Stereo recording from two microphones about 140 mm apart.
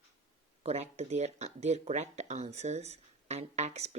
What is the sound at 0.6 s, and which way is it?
Speech, 50° right (ahead or behind).